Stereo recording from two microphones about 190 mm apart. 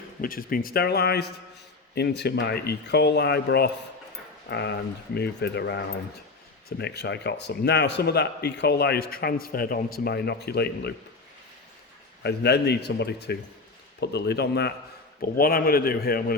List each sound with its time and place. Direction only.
0.2 s a man's voice: 50° left (ahead or behind)
12.2 s a man's voice: 60° left (ahead or behind)